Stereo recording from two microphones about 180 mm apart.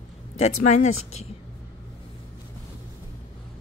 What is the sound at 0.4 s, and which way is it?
Speech, 40° left (ahead or behind).